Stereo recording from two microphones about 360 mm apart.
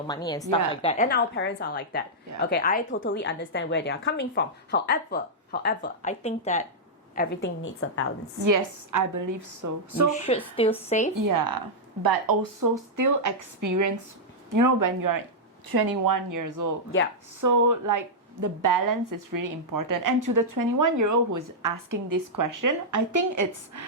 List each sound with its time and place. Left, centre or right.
0.1 s a woman's voice: centre; by 8.0 s left
8.4 s a woman's voice: right
10.2 s speech: centre
11.1 s a woman's voice: right
15.7 s a woman's voice: right